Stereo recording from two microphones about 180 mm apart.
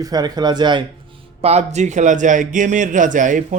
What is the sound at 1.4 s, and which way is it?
A man's voice, 35° right (ahead or behind).